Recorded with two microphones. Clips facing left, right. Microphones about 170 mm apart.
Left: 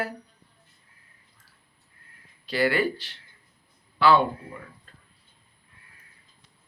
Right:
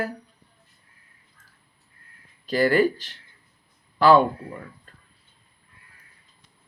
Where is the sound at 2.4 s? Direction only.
45° right (ahead or behind).